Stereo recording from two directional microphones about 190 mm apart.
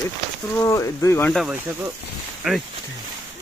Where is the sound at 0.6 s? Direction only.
15° left (ahead or behind).